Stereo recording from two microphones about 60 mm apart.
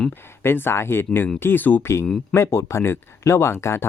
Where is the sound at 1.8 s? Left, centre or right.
Left.